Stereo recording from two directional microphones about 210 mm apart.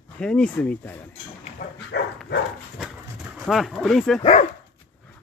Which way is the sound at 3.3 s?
Centre (ahead or behind).